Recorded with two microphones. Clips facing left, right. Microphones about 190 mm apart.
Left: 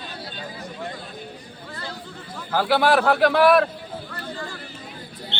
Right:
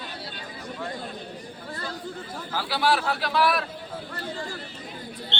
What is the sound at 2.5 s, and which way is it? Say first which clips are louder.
A man's voice: left 6 dB; 55° left (ahead or behind).